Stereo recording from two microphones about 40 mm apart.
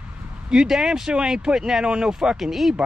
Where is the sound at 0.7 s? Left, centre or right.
Centre.